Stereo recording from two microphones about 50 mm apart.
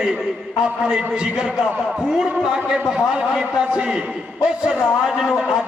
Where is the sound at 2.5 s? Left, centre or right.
Centre.